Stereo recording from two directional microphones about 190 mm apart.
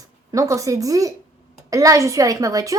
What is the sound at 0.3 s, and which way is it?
A woman's voice, 15° right (ahead or behind).